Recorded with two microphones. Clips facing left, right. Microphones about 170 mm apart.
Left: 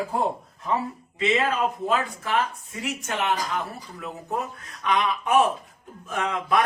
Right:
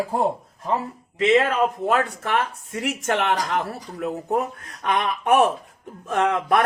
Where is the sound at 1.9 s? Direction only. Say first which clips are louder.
Right 3 dB; 65° right (ahead or behind).